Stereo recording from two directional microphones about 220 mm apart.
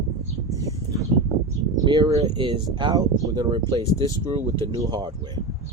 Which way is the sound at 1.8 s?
15° right (ahead or behind).